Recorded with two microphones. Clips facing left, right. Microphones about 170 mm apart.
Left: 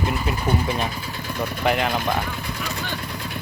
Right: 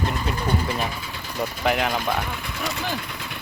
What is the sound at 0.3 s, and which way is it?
Speech, 10° left (ahead or behind).